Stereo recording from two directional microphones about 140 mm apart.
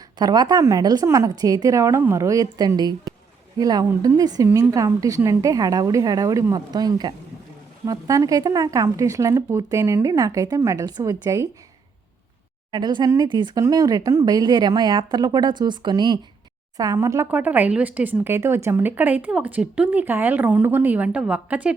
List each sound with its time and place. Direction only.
0.2 s speech: 30° right (ahead or behind)
4.4 s speech: 15° right (ahead or behind)
12.7 s speech: 30° right (ahead or behind); by 21.7 s 10° right (ahead or behind)